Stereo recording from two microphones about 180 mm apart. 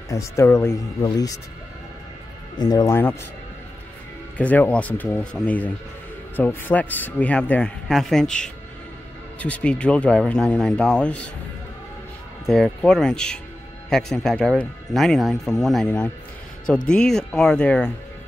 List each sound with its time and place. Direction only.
0.1 s speech: 15° left (ahead or behind)
2.6 s speech: 20° left (ahead or behind)
4.4 s speech: 10° left (ahead or behind)
12.4 s speech: 5° left (ahead or behind)